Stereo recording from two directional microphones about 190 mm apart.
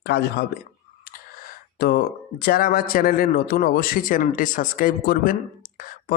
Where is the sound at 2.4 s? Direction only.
50° left (ahead or behind).